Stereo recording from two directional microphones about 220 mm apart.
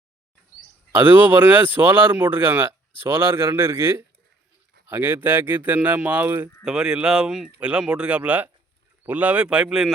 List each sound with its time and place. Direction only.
0.9 s speech: 10° right (ahead or behind)